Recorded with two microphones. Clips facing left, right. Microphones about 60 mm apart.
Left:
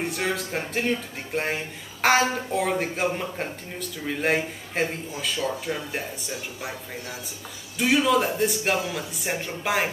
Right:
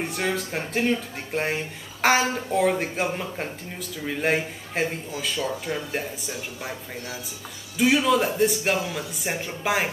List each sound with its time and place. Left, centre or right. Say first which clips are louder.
0.0 s speech: even; centre